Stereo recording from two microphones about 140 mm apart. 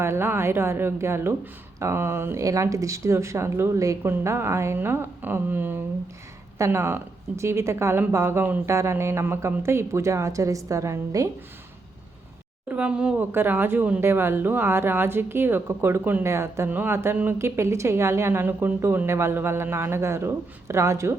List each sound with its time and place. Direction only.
0.0 s speech: 20° right (ahead or behind)
12.6 s speech: 10° right (ahead or behind)